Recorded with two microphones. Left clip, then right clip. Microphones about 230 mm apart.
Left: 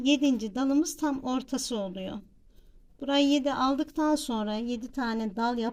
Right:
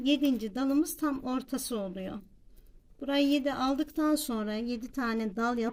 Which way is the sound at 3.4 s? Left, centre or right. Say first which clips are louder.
Left 3 dB; centre.